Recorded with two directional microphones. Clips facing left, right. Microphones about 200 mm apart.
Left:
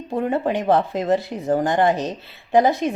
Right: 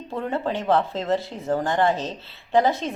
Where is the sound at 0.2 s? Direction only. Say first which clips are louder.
Left 5 dB; 15° left (ahead or behind).